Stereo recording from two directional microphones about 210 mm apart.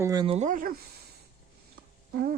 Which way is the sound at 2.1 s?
45° right (ahead or behind).